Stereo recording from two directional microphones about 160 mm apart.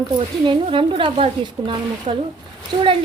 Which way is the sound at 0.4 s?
30° right (ahead or behind).